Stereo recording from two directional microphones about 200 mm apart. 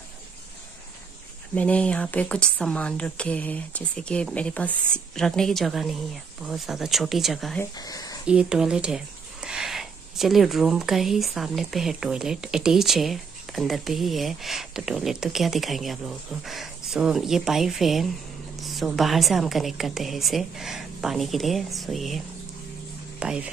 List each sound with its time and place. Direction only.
1.5 s speech: 5° left (ahead or behind)
7.7 s speech: 20° left (ahead or behind)
8.3 s speech: 5° right (ahead or behind)